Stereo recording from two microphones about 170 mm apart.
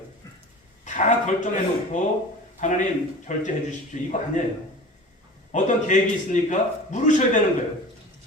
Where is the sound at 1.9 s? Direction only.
45° left (ahead or behind).